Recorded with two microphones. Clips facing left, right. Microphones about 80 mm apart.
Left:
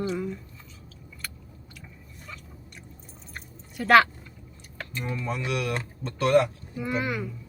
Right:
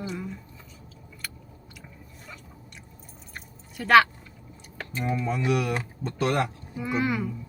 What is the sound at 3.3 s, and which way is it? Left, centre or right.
Chewing, centre.